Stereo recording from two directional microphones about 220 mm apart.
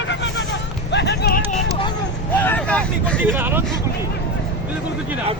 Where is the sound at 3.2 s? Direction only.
10° right (ahead or behind).